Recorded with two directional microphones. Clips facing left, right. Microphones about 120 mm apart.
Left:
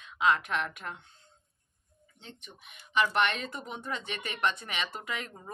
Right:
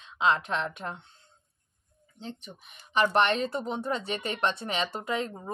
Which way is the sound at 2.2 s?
35° right (ahead or behind).